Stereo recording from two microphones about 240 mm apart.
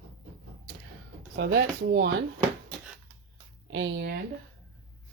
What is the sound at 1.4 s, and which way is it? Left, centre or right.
Speech, right.